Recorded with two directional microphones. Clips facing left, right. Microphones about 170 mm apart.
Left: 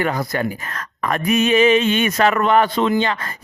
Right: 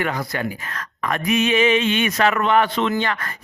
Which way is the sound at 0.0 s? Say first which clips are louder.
Left 3 dB; 40° left (ahead or behind).